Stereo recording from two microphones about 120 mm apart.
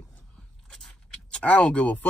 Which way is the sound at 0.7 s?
5° left (ahead or behind).